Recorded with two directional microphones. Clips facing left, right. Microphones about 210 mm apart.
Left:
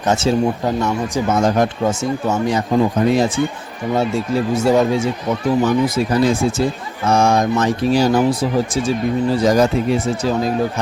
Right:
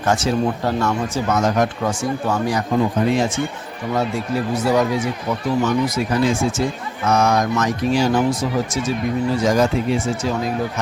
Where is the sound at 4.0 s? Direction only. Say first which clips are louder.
Left 3 dB; 25° left (ahead or behind).